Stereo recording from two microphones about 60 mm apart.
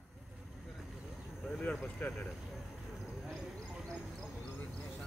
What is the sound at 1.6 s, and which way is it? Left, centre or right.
Speech, left.